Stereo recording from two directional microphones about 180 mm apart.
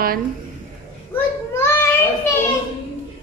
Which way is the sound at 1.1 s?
15° left (ahead or behind).